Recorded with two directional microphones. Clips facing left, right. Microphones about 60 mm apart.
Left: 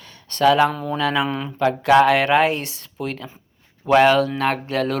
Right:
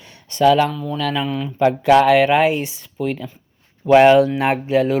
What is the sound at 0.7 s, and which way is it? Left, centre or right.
Speech, left.